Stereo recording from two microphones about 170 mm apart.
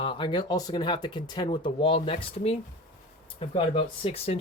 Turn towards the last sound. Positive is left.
turn(degrees=35)  # may be behind; listen again after turning